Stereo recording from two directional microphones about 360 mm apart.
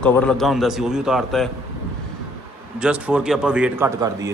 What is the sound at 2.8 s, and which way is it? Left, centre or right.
A man's voice, centre.